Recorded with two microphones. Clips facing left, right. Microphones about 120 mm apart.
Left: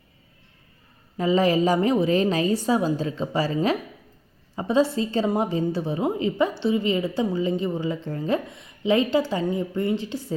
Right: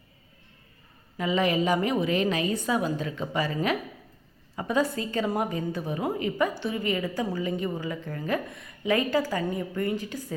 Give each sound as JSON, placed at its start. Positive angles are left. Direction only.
{"t": 1.1, "sound": "a woman's voice", "side_deg": 30}